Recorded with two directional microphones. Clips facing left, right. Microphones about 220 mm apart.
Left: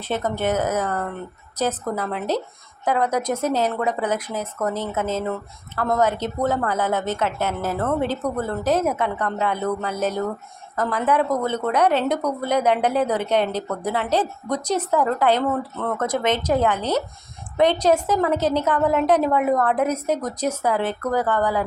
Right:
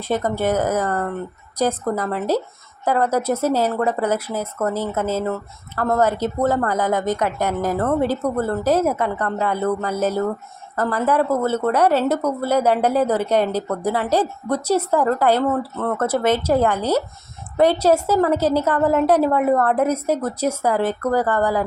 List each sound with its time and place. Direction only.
0.1 s speech: 10° right (ahead or behind)